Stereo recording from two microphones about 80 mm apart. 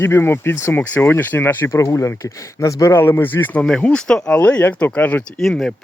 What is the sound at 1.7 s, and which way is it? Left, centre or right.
Speech, left.